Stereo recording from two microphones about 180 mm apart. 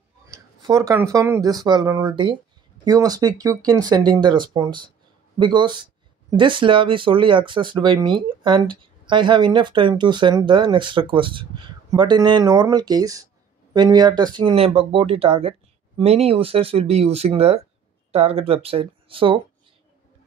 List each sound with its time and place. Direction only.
0.3 s speech: 20° right (ahead or behind)